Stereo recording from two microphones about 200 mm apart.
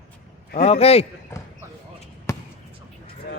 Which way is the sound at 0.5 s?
30° left (ahead or behind).